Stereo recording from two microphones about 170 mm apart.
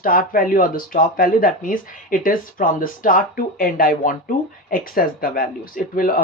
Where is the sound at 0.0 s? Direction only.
55° left (ahead or behind).